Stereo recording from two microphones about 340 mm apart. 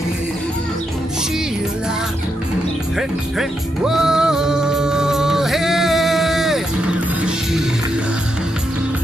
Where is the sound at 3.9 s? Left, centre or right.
Centre.